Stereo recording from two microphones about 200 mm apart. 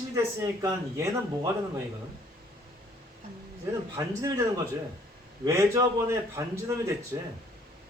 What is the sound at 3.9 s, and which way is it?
A man's voice, 15° right (ahead or behind).